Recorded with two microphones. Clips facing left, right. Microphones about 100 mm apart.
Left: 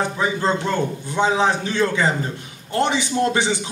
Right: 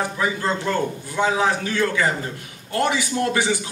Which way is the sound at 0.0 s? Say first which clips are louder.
Left 2 dB; 20° left (ahead or behind).